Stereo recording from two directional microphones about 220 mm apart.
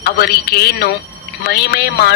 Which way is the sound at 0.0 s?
45° left (ahead or behind).